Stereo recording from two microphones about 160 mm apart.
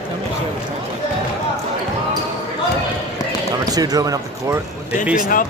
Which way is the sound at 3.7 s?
25° right (ahead or behind).